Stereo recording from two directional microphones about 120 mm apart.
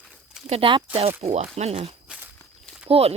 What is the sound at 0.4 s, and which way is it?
Speech, 60° right (ahead or behind).